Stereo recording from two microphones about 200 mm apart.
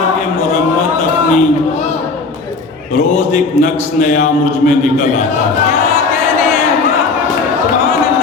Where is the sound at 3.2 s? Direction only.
40° left (ahead or behind).